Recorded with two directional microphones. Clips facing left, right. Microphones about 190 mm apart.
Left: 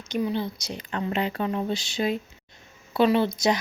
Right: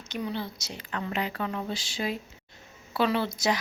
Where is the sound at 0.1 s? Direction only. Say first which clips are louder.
Left 6 dB; 15° left (ahead or behind).